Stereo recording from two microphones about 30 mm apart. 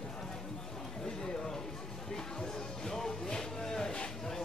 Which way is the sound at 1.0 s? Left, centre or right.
Left.